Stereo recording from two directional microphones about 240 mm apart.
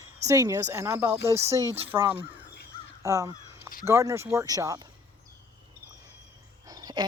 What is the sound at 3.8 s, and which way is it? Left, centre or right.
A woman's voice, centre.